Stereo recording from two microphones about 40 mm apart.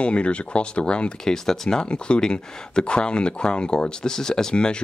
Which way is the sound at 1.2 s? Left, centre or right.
Centre.